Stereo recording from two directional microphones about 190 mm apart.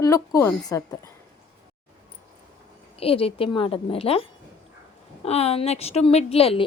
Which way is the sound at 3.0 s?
30° left (ahead or behind).